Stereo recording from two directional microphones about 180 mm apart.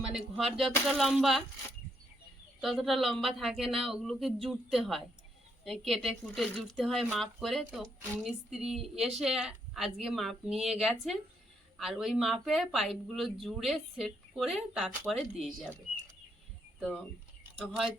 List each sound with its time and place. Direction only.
0.3 s speech: centre (ahead or behind)
2.6 s speech: centre (ahead or behind)
17.6 s speech: centre (ahead or behind)